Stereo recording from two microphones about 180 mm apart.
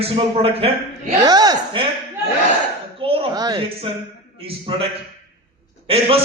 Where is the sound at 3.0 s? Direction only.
30° right (ahead or behind).